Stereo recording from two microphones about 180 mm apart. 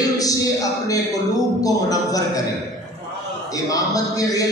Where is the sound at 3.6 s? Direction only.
20° left (ahead or behind).